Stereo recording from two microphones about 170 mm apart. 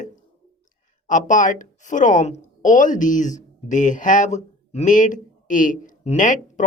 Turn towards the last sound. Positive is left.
turn(degrees=50)  # may be behind; listen again after turning